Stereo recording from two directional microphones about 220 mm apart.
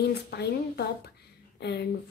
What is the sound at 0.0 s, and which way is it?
A woman's voice, 45° left (ahead or behind).